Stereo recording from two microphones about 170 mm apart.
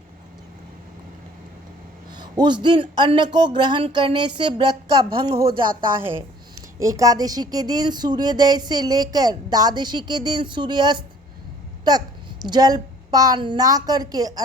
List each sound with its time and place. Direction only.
2.1 s a man's voice: 25° right (ahead or behind)